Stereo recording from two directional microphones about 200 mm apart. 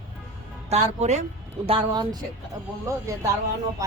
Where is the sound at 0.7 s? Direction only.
35° right (ahead or behind).